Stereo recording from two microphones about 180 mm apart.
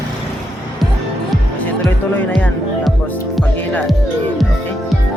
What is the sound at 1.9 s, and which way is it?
Speech, 5° left (ahead or behind).